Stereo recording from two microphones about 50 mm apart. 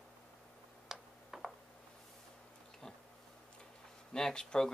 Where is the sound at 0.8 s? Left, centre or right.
Centre.